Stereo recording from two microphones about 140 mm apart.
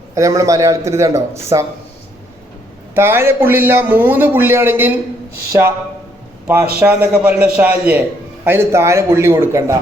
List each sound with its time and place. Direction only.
0.1 s a man's voice: 25° right (ahead or behind)
2.9 s a man's voice: 15° right (ahead or behind)
6.7 s a man's voice: 10° right (ahead or behind)